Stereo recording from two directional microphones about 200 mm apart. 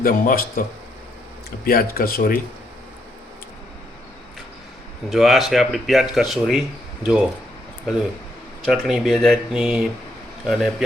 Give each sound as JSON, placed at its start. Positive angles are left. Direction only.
{"t": 0.0, "sound": "speech", "side_deg": 45}
{"t": 1.6, "sound": "speech", "side_deg": 45}
{"t": 5.0, "sound": "speech", "side_deg": 0}
{"t": 8.6, "sound": "speech", "side_deg": 0}